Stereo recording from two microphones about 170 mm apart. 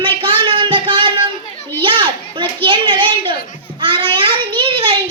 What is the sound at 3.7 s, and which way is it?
Child singing, 30° right (ahead or behind).